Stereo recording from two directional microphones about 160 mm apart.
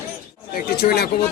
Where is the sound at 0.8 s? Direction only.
70° left (ahead or behind).